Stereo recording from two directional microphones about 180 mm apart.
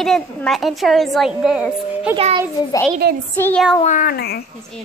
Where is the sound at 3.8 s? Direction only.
45° left (ahead or behind).